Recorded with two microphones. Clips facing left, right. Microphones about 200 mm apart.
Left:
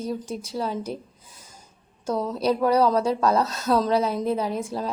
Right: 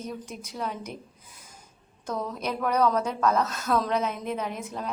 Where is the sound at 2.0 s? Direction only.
30° left (ahead or behind).